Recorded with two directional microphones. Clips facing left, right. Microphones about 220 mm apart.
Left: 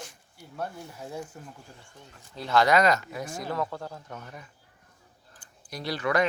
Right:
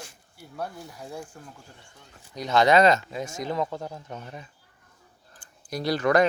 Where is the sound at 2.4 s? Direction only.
20° right (ahead or behind).